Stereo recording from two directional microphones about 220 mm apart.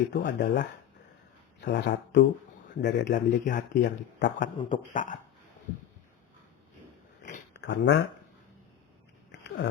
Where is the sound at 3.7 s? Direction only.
50° left (ahead or behind).